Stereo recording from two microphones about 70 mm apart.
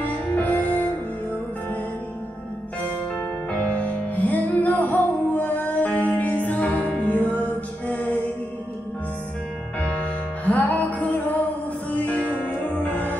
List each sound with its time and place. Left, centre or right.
0.0 s music: left
3.5 s music: centre
9.8 s music: centre